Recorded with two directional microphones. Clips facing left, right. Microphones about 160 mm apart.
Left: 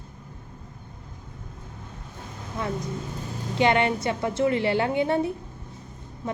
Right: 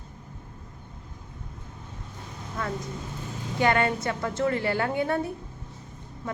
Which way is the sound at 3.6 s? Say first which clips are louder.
Left 2 dB; 20° left (ahead or behind).